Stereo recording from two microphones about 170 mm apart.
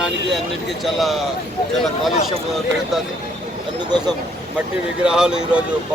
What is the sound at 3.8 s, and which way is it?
Speech, 25° right (ahead or behind).